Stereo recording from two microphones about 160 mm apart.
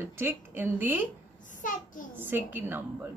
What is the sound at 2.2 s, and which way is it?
Speech, 10° right (ahead or behind).